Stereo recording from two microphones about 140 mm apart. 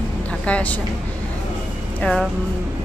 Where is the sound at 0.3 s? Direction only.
10° left (ahead or behind).